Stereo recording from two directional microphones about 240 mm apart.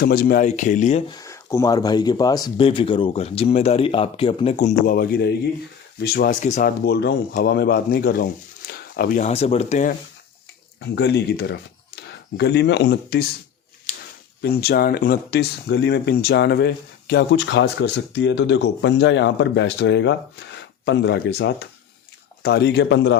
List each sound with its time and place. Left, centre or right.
0.0 s speech: left
10.8 s speech: left
14.4 s speech: left